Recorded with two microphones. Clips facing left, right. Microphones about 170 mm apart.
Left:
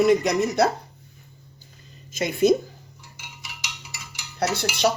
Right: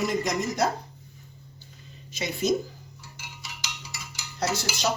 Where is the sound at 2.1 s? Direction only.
50° left (ahead or behind).